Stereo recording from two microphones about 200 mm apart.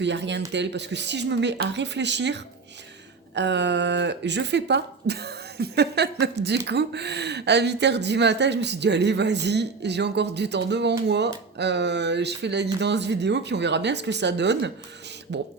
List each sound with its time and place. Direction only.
0.0 s speech: 60° right (ahead or behind)